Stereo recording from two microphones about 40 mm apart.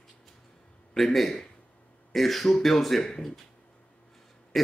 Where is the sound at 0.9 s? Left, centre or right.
Centre.